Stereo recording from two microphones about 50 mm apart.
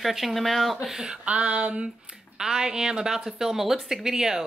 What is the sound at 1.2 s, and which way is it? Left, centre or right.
Speech, right.